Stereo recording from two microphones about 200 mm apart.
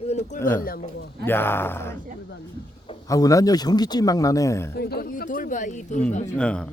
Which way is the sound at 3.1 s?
15° left (ahead or behind).